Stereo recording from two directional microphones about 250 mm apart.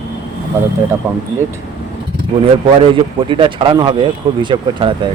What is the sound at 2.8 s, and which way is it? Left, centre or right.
Speech, right.